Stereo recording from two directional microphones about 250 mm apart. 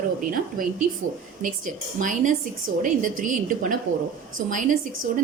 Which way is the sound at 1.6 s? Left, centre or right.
Right.